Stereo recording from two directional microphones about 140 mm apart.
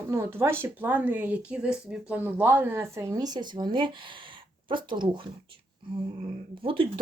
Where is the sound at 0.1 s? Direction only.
20° right (ahead or behind); by 5.2 s 35° right (ahead or behind).